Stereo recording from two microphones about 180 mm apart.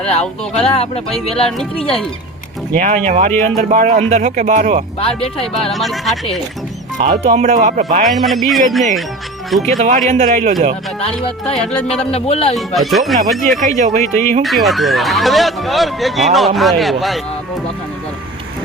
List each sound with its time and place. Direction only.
0.0 s speech: 35° left (ahead or behind)
2.7 s speech: 45° right (ahead or behind)
4.9 s speech: 30° left (ahead or behind)
5.7 s speech: centre (ahead or behind)
7.3 s speech: 45° right (ahead or behind)
8.0 s speech: centre (ahead or behind)
9.6 s speech: 40° right (ahead or behind)
11.0 s speech: 35° left (ahead or behind)
11.6 s speech: 5° left (ahead or behind)
12.1 s speech: 35° left (ahead or behind)
12.5 s speech: centre (ahead or behind)
13.7 s speech: 40° right (ahead or behind)
14.4 s speech: centre (ahead or behind)